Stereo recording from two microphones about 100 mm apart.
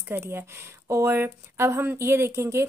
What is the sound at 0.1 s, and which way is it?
Speech, 25° right (ahead or behind).